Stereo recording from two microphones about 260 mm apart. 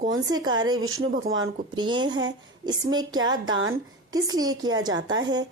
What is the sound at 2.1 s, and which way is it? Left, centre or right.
Speech, right.